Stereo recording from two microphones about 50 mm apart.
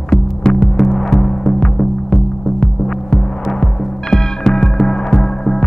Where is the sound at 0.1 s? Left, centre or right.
Centre.